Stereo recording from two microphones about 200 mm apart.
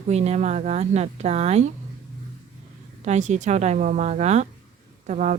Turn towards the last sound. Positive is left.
turn(degrees=-35)  # may be behind; listen again after turning